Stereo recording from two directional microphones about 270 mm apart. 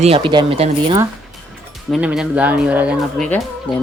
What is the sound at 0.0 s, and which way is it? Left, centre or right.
Speech, centre.